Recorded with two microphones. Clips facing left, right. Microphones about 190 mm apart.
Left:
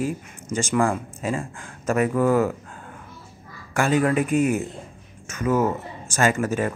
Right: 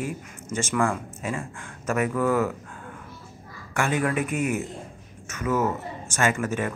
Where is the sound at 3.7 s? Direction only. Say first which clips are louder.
Left 5 dB; 35° left (ahead or behind).